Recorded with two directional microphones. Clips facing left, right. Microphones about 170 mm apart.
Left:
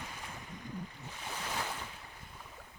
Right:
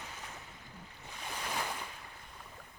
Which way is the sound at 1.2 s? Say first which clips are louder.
Right 1 dB; 10° right (ahead or behind).